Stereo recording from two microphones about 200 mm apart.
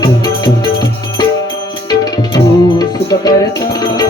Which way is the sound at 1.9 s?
20° left (ahead or behind).